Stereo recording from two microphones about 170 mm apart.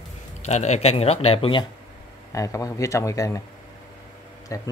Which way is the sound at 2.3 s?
20° left (ahead or behind).